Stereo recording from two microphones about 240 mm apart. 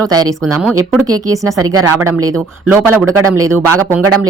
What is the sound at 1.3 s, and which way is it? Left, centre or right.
Speech, centre.